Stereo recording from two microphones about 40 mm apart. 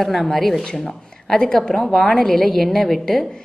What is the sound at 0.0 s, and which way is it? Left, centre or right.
A woman's voice, centre.